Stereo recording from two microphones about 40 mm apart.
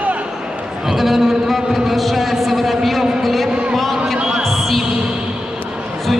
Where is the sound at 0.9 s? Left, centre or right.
Centre.